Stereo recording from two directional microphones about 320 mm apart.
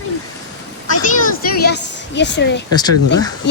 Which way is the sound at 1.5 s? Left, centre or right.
Left.